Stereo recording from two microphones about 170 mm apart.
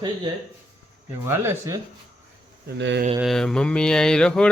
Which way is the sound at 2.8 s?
90° right.